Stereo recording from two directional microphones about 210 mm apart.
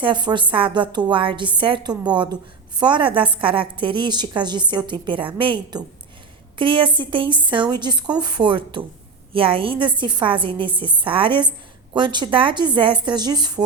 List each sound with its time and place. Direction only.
0.0 s a woman's voice: 20° right (ahead or behind)